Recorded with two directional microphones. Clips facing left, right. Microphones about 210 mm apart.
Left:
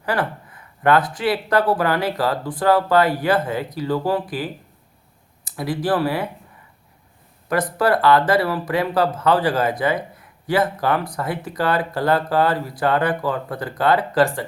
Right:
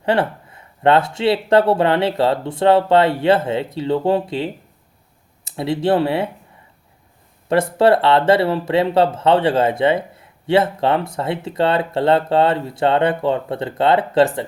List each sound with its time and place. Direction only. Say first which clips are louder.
0.0 s speech: right 5 dB; 25° right (ahead or behind)
7.5 s speech: right 5 dB; 25° right (ahead or behind)